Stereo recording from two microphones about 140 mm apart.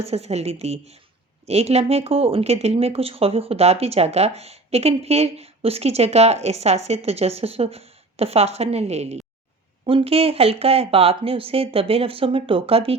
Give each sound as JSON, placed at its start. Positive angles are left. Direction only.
{"t": 0.0, "sound": "speech", "side_deg": -50}